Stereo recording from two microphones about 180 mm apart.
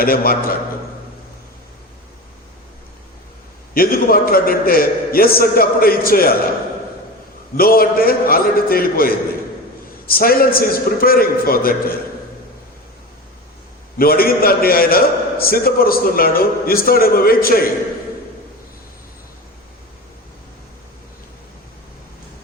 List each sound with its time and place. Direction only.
0.0 s a man's voice: 55° left (ahead or behind)
3.8 s a man's voice: 55° left (ahead or behind)
7.5 s a man's voice: 55° left (ahead or behind)
14.0 s a man's voice: 55° left (ahead or behind)